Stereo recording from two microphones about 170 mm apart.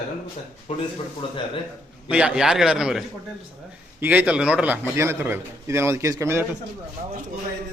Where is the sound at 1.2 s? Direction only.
30° left (ahead or behind).